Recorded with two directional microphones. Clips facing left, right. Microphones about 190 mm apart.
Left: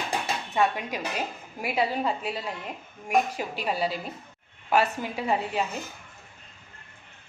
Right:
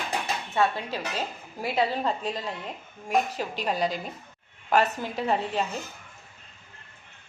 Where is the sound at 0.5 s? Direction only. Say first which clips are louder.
Even; 15° left (ahead or behind).